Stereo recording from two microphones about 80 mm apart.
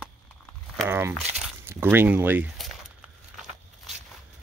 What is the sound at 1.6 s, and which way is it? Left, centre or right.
Speech, right.